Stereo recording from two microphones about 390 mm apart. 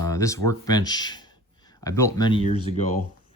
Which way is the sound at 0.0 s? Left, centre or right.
Centre.